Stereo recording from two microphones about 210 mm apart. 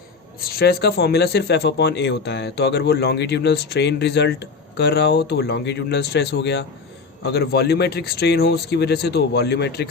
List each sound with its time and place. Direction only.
0.4 s speech: 45° left (ahead or behind)